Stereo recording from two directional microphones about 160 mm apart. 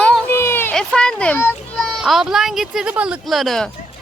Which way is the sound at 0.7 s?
5° left (ahead or behind).